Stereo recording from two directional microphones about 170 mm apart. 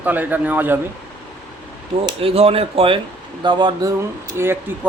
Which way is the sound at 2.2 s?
35° right (ahead or behind).